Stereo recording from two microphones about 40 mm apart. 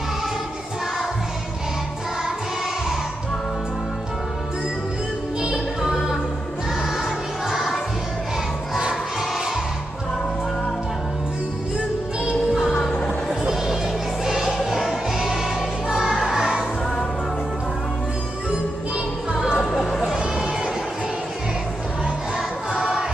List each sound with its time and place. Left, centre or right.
5.8 s music: centre
7.4 s music: centre
13.3 s a sound: centre
14.2 s music: centre
19.3 s music: centre
19.7 s a sound: centre
20.0 s sheep: centre
22.7 s music: centre